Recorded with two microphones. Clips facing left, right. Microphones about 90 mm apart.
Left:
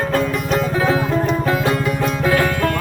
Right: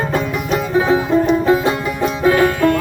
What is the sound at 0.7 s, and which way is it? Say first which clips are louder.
Music: right 6 dB; 20° right (ahead or behind).